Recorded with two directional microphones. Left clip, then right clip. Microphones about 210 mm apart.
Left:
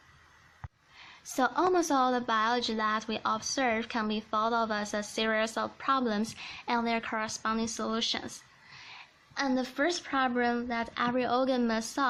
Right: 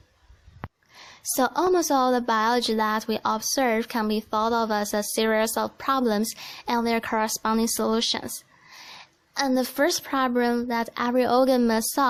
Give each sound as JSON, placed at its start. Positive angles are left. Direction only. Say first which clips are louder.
{"t": 0.9, "sound": "a woman's voice", "louder": "right 6 dB", "side_deg": -45}